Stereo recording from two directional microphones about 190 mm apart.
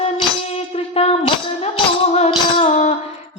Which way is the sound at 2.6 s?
35° left (ahead or behind).